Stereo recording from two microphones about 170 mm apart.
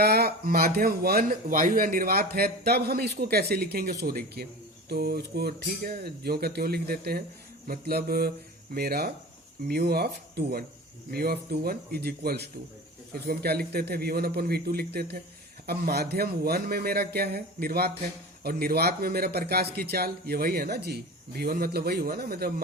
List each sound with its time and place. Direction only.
0.0 s speech: 65° right (ahead or behind)